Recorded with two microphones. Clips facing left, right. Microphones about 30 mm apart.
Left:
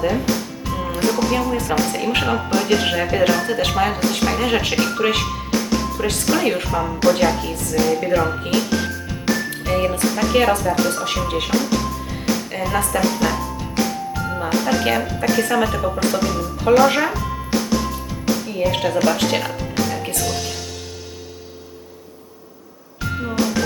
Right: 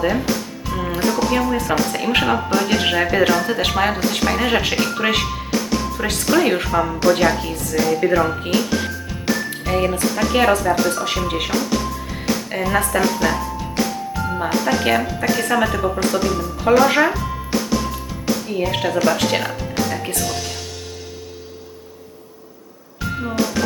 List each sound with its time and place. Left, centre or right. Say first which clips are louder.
0.0 s speech: right 1 dB; centre
0.6 s music: right 1 dB; centre
1.4 s speech: right 1 dB; centre
12.5 s music: right 2 dB; centre
14.3 s speech: even; centre
17.2 s music: even; centre
18.5 s speech: even; centre
20.1 s music: even; centre
23.0 s music: even; centre